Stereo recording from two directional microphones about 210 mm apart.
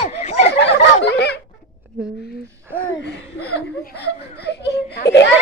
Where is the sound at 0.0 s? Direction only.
30° left (ahead or behind).